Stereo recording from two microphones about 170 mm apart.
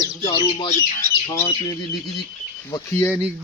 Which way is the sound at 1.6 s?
20° left (ahead or behind).